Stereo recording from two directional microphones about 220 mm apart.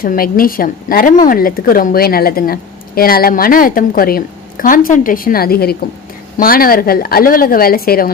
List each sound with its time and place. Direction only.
0.0 s a woman's voice: 40° left (ahead or behind)